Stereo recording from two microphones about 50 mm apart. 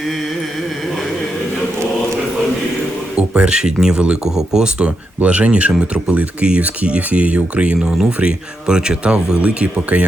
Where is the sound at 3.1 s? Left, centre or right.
Right.